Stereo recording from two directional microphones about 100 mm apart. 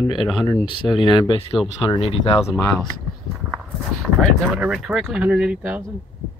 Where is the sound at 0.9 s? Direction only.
50° left (ahead or behind).